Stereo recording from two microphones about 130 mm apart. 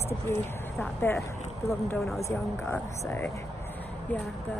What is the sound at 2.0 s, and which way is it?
Speech, centre (ahead or behind).